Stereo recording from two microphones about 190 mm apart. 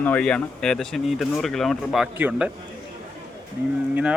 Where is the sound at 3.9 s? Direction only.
5° right (ahead or behind).